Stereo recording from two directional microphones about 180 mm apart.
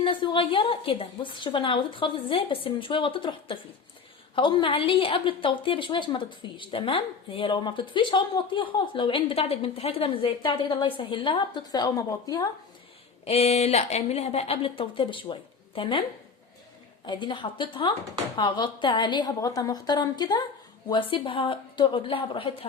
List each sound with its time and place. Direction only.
0.0 s a woman's voice: 25° left (ahead or behind)
13.2 s speech: 35° left (ahead or behind)
17.1 s a woman's voice: 25° left (ahead or behind)